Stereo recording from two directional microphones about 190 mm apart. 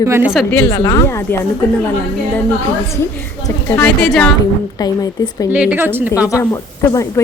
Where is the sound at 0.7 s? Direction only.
20° left (ahead or behind).